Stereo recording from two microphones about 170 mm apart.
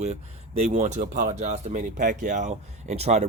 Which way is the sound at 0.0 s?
40° right (ahead or behind).